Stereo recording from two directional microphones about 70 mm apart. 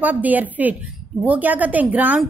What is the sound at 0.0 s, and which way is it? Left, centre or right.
A woman's voice, right.